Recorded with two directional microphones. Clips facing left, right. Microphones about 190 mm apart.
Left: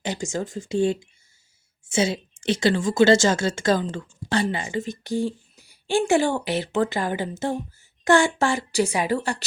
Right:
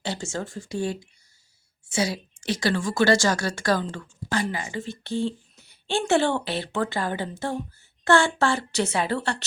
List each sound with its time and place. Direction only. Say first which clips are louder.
0.0 s a woman's voice: left 3 dB; 15° left (ahead or behind)